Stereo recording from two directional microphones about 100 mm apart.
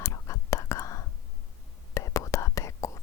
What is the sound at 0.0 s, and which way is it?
Whispering, 30° left (ahead or behind).